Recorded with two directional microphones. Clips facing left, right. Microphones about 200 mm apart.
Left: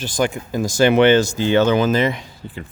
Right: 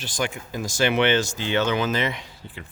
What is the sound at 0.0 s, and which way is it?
Speech, 45° left (ahead or behind).